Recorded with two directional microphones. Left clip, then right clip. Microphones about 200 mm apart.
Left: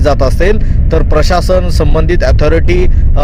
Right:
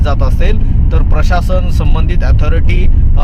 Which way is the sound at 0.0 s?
45° left (ahead or behind).